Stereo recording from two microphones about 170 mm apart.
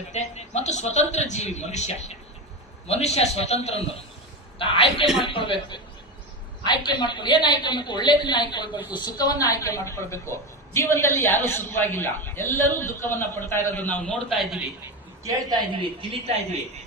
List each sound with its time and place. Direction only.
0.1 s a man's voice: 40° left (ahead or behind); by 14.6 s centre (ahead or behind)
15.3 s a woman's voice: 25° right (ahead or behind)